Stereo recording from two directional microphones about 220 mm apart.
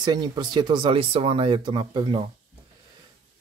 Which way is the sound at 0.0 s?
20° right (ahead or behind).